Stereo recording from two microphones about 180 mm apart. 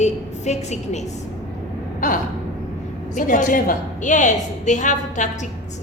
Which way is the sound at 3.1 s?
50° left (ahead or behind).